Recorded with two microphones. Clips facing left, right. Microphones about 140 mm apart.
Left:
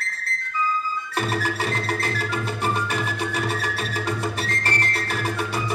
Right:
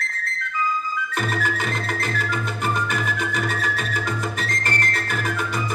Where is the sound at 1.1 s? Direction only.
35° left (ahead or behind).